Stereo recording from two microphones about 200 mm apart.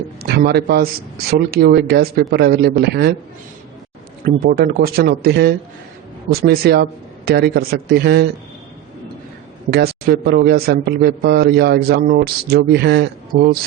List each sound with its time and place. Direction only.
0.2 s a man's voice: 55° right (ahead or behind)
4.4 s a man's voice: 50° right (ahead or behind)
9.6 s a man's voice: 55° right (ahead or behind)